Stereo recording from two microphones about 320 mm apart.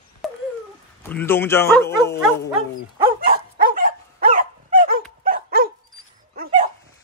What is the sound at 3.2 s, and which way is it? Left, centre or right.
Dog, right.